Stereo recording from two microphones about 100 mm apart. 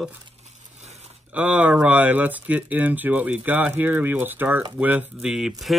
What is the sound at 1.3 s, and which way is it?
Speech, 15° right (ahead or behind).